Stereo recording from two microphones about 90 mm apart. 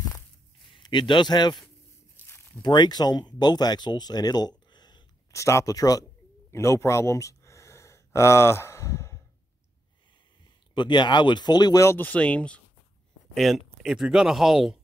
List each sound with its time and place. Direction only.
0.7 s speech: 55° left (ahead or behind)
2.2 s a sound: 25° left (ahead or behind)
2.6 s speech: 55° left (ahead or behind)
5.3 s speech: 35° left (ahead or behind)
6.5 s a sound: 35° left (ahead or behind)
10.7 s speech: 60° left (ahead or behind)
12.0 s speech: 15° left (ahead or behind)
13.3 s speech: centre (ahead or behind)